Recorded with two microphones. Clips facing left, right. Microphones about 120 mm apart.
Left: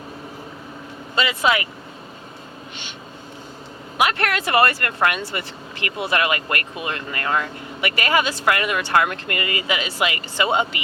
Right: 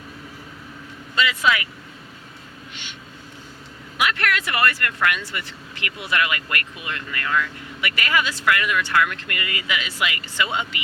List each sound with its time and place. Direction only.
1.1 s speech: 30° left (ahead or behind)
3.9 s speech: 35° left (ahead or behind)